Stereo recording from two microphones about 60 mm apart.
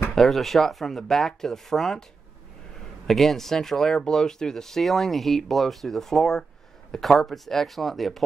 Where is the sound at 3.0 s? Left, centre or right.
Centre.